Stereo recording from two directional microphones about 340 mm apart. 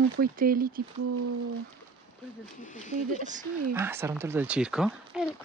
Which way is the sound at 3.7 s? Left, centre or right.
Centre.